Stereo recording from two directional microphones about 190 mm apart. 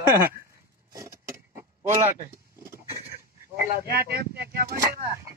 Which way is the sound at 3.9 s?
55° right (ahead or behind).